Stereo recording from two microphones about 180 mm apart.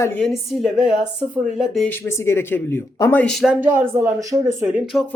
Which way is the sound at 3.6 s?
10° right (ahead or behind).